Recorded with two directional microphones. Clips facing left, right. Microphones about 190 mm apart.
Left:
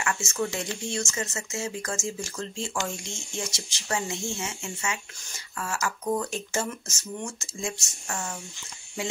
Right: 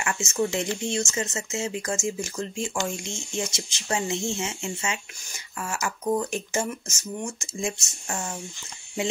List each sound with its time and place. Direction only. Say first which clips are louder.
0.0 s speech: right 3 dB; 20° right (ahead or behind)